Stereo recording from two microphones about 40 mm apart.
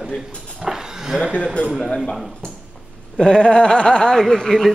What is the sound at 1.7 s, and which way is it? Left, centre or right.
Dog, centre.